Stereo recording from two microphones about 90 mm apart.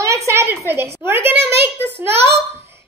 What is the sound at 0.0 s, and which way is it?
A woman's voice, 35° right (ahead or behind).